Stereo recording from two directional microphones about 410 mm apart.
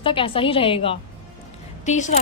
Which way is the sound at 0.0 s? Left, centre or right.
Centre.